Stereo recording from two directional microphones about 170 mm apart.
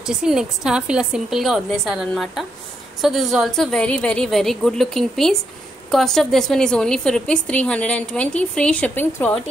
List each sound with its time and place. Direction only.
0.0 s a woman's voice: 5° right (ahead or behind)